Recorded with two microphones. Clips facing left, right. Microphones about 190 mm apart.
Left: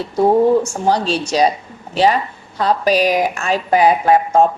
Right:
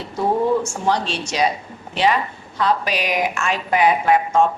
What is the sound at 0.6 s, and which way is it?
Speech, 35° left (ahead or behind).